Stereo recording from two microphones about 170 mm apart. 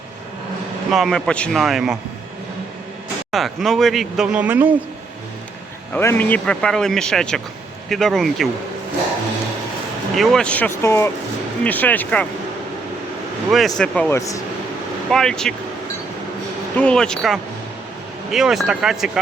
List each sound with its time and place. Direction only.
0.9 s speech: centre (ahead or behind)
3.3 s speech: centre (ahead or behind)
5.9 s speech: 15° left (ahead or behind)
10.2 s speech: 5° left (ahead or behind)
13.5 s speech: centre (ahead or behind)
14.2 s speech: 20° left (ahead or behind)
15.1 s speech: 5° left (ahead or behind)
16.7 s speech: 5° left (ahead or behind)